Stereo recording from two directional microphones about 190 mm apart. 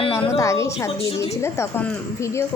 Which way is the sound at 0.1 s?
15° left (ahead or behind).